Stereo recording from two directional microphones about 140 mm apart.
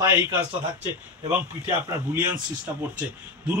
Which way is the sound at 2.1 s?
15° right (ahead or behind).